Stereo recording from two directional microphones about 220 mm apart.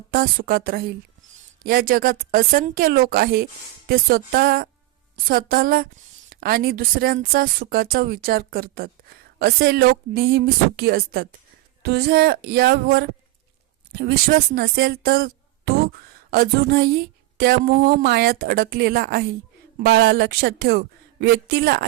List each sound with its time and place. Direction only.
0.1 s a woman's voice: 40° right (ahead or behind)